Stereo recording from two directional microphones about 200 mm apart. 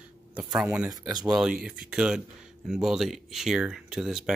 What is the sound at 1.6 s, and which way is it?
Speech, 5° right (ahead or behind).